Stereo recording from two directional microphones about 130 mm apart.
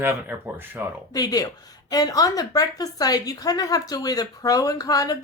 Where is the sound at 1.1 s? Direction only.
30° left (ahead or behind).